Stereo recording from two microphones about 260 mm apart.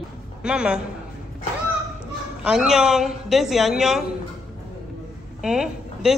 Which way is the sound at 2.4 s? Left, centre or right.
Centre.